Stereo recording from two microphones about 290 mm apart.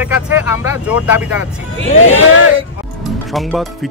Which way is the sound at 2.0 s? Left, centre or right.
Left.